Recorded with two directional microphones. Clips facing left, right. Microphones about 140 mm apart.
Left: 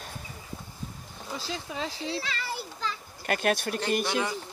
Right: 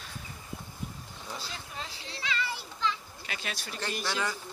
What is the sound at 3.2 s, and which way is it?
Speech, 55° left (ahead or behind).